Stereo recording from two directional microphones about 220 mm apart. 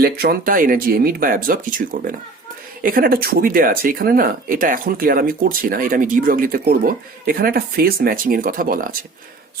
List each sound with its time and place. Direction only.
0.0 s speech: 45° right (ahead or behind)